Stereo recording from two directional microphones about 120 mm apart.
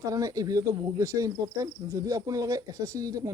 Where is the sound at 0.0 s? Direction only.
30° right (ahead or behind).